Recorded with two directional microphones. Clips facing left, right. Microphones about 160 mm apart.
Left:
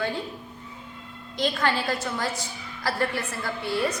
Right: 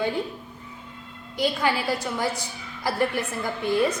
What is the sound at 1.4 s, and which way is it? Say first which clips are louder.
A woman's voice: right 1 dB; 10° right (ahead or behind).